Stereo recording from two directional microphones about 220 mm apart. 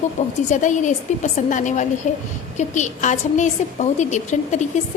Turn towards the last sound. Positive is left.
turn(degrees=35)  # may be behind; listen again after turning